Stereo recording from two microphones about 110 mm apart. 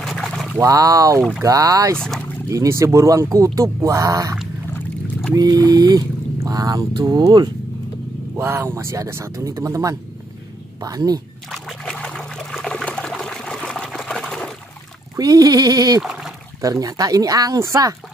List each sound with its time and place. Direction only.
0.0 s a sound: 5° left (ahead or behind)
0.6 s speech: 30° right (ahead or behind)
2.0 s speech: centre (ahead or behind)
2.5 s speech: 30° right (ahead or behind)
8.4 s speech: 20° right (ahead or behind)
11.5 s trickle: 5° left (ahead or behind)
15.1 s speech: 35° right (ahead or behind)
16.0 s trickle: 5° right (ahead or behind)
16.6 s speech: 30° right (ahead or behind)